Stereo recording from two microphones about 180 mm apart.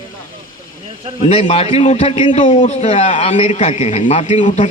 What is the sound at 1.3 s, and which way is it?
A man's voice, 30° left (ahead or behind).